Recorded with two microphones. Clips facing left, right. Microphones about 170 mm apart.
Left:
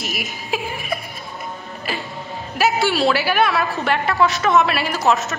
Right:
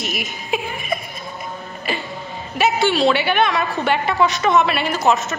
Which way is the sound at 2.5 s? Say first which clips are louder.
Right 1 dB; centre (ahead or behind).